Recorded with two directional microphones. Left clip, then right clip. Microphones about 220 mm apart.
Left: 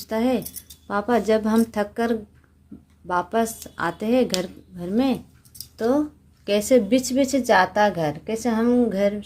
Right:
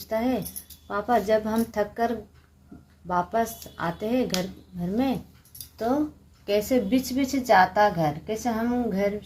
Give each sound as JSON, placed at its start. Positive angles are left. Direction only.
{"t": 0.1, "sound": "a woman's voice", "side_deg": 45}